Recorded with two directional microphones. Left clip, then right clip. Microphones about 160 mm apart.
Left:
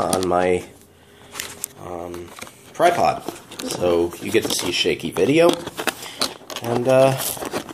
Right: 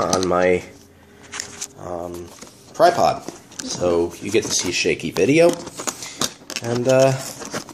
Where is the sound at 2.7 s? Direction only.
5° right (ahead or behind).